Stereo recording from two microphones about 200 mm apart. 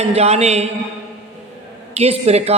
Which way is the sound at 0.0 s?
30° right (ahead or behind).